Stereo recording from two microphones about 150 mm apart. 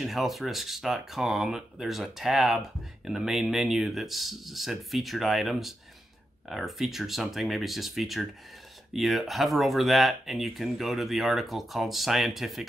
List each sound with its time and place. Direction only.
0.0 s speech: centre (ahead or behind)